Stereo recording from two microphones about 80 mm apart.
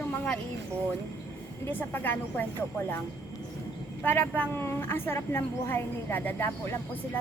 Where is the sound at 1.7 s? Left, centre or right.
Left.